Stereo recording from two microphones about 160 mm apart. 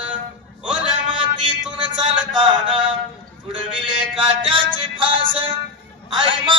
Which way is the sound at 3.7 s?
30° right (ahead or behind).